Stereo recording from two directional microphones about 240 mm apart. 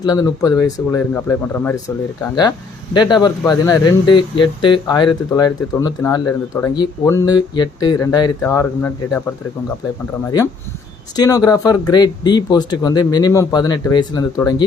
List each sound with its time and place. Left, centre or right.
0.0 s speech: centre
2.9 s speech: centre
11.2 s speech: centre